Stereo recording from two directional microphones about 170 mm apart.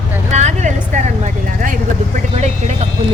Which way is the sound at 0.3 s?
45° right (ahead or behind).